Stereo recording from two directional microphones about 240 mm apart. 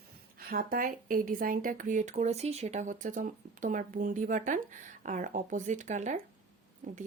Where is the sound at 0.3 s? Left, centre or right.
Right.